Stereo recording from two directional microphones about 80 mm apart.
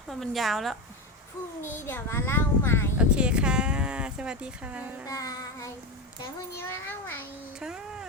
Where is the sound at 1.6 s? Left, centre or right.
Left.